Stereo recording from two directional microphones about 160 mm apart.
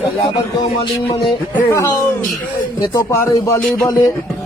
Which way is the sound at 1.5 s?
15° left (ahead or behind).